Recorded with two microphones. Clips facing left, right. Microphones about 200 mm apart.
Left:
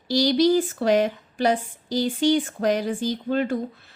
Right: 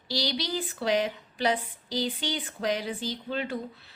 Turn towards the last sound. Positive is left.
turn(degrees=50)  # may be behind; listen again after turning